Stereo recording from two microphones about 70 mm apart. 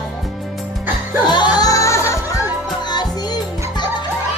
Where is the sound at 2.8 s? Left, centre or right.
Left.